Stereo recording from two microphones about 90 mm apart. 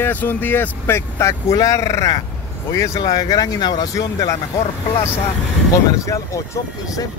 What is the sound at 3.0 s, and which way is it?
Speech, 45° left (ahead or behind).